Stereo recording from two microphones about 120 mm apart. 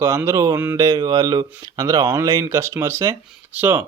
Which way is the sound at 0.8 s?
30° right (ahead or behind).